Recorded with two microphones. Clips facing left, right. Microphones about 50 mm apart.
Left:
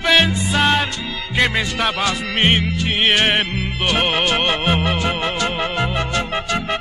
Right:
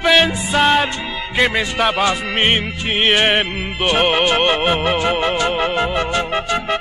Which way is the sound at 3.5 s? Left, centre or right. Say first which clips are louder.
Right 2 dB; centre.